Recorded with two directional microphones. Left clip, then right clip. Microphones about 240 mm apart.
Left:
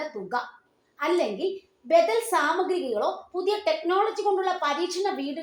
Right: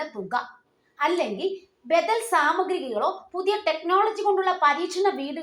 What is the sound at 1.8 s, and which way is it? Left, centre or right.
A woman's voice, centre.